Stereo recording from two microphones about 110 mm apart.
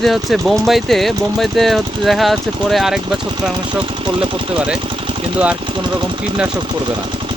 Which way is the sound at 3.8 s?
45° right (ahead or behind).